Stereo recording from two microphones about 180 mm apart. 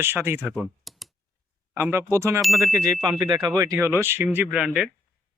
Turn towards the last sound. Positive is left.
turn(degrees=-5)  # may be behind; listen again after turning